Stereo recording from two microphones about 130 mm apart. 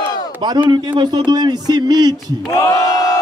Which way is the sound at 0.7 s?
35° right (ahead or behind).